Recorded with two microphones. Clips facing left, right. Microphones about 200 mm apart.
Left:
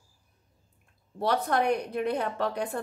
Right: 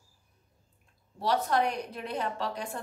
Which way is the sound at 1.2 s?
55° left (ahead or behind).